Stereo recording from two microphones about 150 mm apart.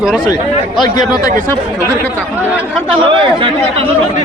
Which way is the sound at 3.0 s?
35° right (ahead or behind).